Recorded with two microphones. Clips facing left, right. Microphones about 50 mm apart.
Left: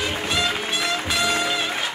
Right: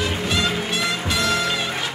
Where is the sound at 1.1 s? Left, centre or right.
Centre.